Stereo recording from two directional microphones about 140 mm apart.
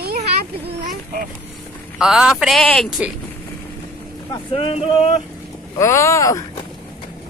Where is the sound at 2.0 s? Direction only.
5° right (ahead or behind).